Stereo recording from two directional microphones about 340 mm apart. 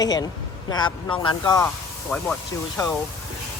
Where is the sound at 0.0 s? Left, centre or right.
Centre.